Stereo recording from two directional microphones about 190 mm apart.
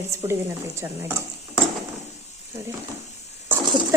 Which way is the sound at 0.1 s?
15° right (ahead or behind).